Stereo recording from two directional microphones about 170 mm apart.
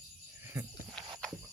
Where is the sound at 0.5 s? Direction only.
15° right (ahead or behind).